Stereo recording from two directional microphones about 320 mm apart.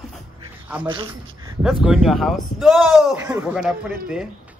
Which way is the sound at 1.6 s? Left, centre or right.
Centre.